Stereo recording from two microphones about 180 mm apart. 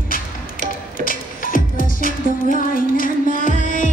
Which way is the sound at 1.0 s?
50° left (ahead or behind).